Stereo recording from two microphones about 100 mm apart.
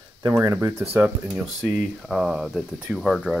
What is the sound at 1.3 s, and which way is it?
Speech, centre (ahead or behind).